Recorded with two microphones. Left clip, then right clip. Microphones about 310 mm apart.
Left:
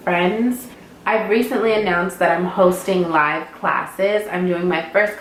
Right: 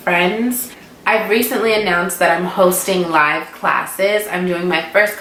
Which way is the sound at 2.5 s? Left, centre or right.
Left.